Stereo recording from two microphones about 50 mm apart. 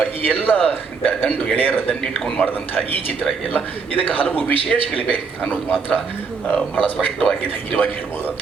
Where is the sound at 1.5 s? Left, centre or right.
Left.